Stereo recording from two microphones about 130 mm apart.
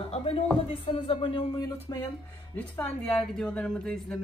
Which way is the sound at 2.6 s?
10° left (ahead or behind).